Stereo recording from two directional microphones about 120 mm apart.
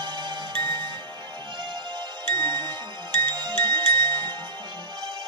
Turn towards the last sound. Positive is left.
turn(degrees=-40)  # may be behind; listen again after turning